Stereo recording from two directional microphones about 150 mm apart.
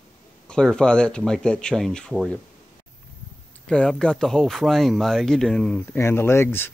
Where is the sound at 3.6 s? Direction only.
5° left (ahead or behind).